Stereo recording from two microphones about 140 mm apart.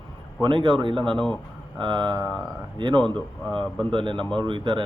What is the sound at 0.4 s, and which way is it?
Speech, 35° right (ahead or behind).